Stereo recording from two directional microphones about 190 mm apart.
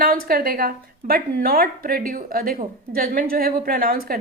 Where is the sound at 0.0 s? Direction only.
50° right (ahead or behind).